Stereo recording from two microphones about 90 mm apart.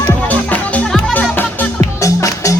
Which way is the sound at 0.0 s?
20° left (ahead or behind).